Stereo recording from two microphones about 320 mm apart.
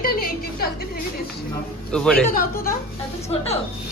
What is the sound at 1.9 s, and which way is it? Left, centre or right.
Speech, centre.